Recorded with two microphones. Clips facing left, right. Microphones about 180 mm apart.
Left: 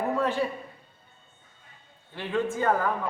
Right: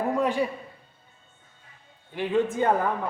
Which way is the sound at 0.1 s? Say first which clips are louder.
Right 3 dB; 15° right (ahead or behind).